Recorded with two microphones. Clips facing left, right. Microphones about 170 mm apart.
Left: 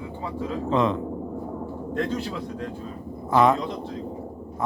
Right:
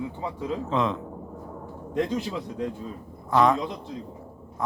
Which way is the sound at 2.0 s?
15° right (ahead or behind).